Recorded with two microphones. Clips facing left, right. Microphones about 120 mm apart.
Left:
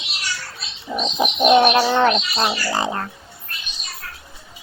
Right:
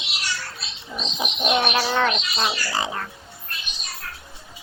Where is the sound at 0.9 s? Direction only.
55° left (ahead or behind); by 1.9 s 40° left (ahead or behind).